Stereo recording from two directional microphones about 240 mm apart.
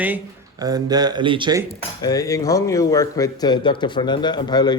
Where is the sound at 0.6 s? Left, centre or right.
Centre.